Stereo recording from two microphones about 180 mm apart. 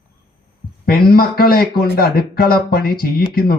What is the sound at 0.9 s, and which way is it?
Speech, 55° left (ahead or behind).